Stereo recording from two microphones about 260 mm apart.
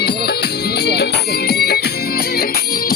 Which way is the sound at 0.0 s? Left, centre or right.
Left.